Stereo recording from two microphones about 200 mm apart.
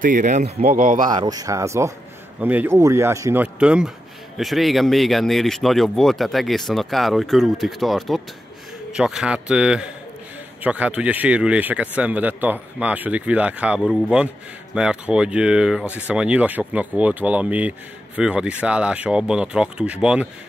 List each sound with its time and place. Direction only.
0.0 s speech: 40° right (ahead or behind)
1.1 s speech: 20° right (ahead or behind)